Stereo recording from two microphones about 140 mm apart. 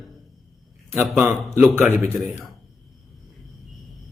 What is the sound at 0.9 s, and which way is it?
Speech, 15° right (ahead or behind).